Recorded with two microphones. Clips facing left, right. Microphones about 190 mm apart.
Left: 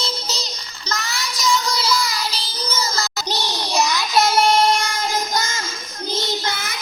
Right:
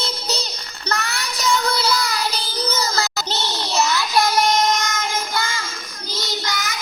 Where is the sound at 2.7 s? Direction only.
35° right (ahead or behind).